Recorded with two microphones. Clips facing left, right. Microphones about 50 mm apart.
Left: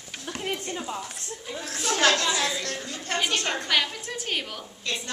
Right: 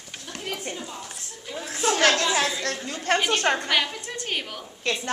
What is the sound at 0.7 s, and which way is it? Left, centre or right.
Speech, left.